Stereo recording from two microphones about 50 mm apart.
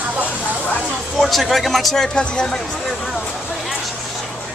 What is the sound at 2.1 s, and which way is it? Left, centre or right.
Speech, centre.